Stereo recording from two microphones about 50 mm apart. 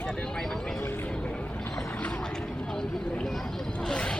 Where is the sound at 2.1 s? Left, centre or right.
Centre.